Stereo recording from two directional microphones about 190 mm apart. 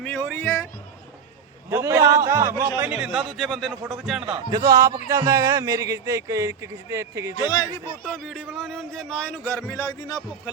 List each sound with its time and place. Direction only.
0.0 s a sound: 5° left (ahead or behind)
0.4 s music: 15° left (ahead or behind)
1.7 s a man's voice: 15° right (ahead or behind)
4.4 s a man's voice: 20° right (ahead or behind)
8.1 s a man's voice: centre (ahead or behind); by 10.5 s 20° left (ahead or behind)